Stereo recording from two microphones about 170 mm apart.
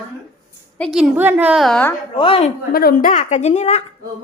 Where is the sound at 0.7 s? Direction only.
5° left (ahead or behind).